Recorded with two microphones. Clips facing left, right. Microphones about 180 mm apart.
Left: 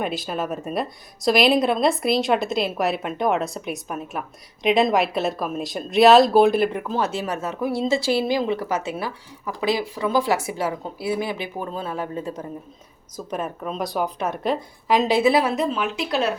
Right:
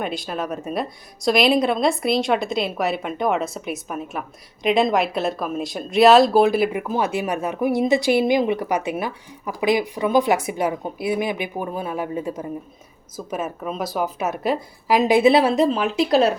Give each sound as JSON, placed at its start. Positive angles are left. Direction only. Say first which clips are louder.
{"t": 0.0, "sound": "a woman's voice", "louder": "even", "side_deg": 0}
{"t": 15.3, "sound": "speech", "louder": "right 4 dB", "side_deg": -30}